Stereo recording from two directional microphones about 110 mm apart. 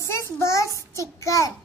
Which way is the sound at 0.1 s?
25° left (ahead or behind).